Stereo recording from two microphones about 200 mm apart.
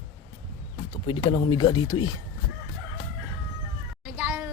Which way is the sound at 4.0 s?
5° right (ahead or behind).